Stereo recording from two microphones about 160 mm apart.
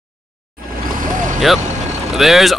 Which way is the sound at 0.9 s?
55° right (ahead or behind).